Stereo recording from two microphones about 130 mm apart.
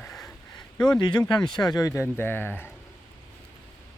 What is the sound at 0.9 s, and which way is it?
Speech, 35° left (ahead or behind).